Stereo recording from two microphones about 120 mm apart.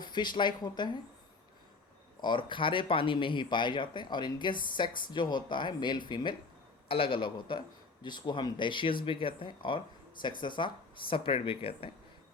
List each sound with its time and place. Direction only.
0.0 s speech: 40° left (ahead or behind)
2.2 s a man's voice: 40° left (ahead or behind)